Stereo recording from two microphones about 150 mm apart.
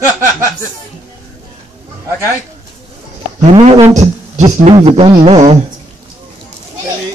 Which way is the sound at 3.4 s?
45° right (ahead or behind).